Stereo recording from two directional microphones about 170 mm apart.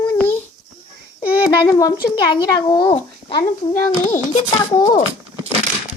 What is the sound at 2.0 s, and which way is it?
Speech, 25° left (ahead or behind).